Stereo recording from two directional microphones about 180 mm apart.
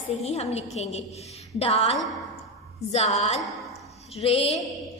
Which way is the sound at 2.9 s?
40° left (ahead or behind).